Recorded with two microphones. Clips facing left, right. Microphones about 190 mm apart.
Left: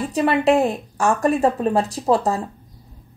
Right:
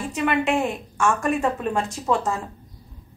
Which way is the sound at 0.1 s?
35° left (ahead or behind).